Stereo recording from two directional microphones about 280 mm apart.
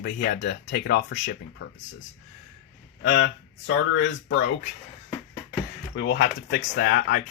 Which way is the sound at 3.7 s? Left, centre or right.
Left.